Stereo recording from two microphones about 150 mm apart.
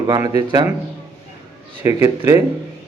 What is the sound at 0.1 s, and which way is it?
Speech, 25° right (ahead or behind).